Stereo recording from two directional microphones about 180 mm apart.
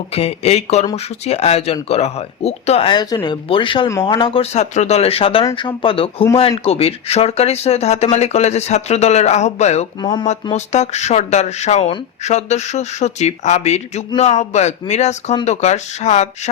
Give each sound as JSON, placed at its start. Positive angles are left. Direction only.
{"t": 0.1, "sound": "speech", "side_deg": 35}
{"t": 10.0, "sound": "speech", "side_deg": 25}
{"t": 10.5, "sound": "speech", "side_deg": 40}